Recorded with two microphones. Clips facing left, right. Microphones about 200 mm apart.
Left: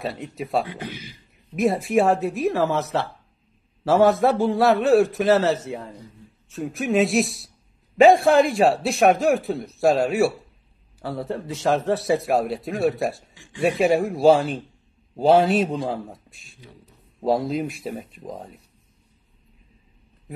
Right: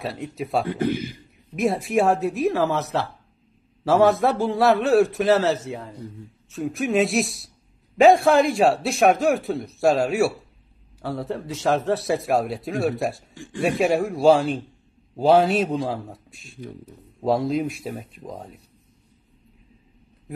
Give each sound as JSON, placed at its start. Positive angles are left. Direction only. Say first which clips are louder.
{"t": 0.0, "sound": "speech", "louder": "even", "side_deg": 0}
{"t": 0.7, "sound": "speech", "louder": "right 11 dB", "side_deg": -50}
{"t": 1.5, "sound": "speech", "louder": "left 2 dB", "side_deg": 0}
{"t": 13.3, "sound": "a sound", "louder": "right 12 dB", "side_deg": -50}
{"t": 13.6, "sound": "speech", "louder": "left 1 dB", "side_deg": 0}